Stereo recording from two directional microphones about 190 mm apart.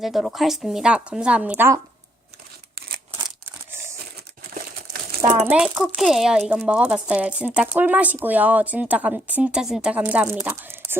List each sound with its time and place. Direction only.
0.0 s speech: centre (ahead or behind)
4.5 s crumpling: 50° right (ahead or behind)
5.5 s speech: 5° right (ahead or behind)